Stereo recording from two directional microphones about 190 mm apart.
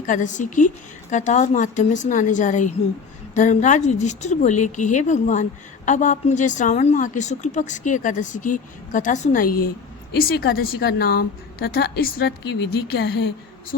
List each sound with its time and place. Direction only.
0.0 s a woman's voice: 40° left (ahead or behind); by 13.3 s 65° left (ahead or behind)